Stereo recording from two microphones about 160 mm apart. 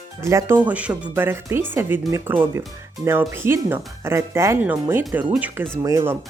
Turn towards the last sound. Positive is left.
turn(degrees=-20)  # may be behind; listen again after turning